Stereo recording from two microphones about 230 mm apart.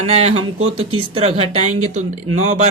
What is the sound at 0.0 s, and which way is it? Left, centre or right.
Speech, right.